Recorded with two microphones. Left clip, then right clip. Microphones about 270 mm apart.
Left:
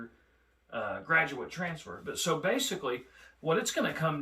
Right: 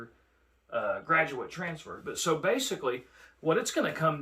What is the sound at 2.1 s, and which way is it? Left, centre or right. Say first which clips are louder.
Speech: right 2 dB; centre.